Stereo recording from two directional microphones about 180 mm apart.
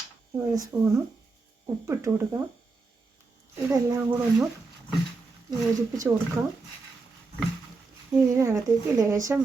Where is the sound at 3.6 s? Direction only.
20° right (ahead or behind).